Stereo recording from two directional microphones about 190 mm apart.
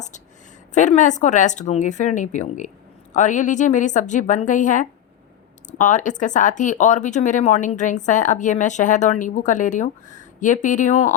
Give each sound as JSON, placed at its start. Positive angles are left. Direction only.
{"t": 0.7, "sound": "speech", "side_deg": 40}